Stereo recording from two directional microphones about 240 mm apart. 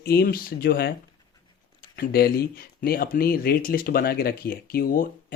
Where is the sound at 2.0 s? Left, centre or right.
Left.